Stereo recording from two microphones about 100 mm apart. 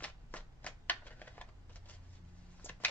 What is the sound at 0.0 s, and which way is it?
Typewriter, 15° left (ahead or behind).